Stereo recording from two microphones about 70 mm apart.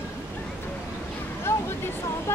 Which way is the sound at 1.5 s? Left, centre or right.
Left.